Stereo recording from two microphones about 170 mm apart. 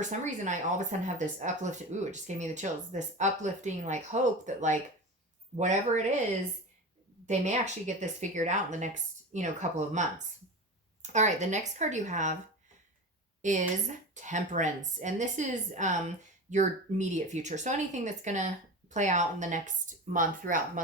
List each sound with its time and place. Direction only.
0.0 s speech: 45° right (ahead or behind)
7.3 s speech: 45° right (ahead or behind)
13.4 s speech: 45° right (ahead or behind)